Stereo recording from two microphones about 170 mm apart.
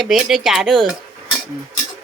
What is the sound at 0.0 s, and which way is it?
Speech, centre (ahead or behind).